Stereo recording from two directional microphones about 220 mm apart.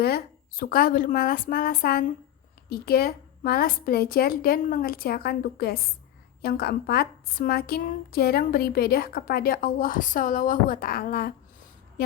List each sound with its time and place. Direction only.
0.0 s a woman's voice: 45° left (ahead or behind)